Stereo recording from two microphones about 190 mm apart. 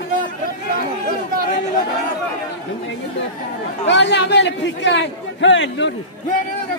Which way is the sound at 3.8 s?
65° left (ahead or behind).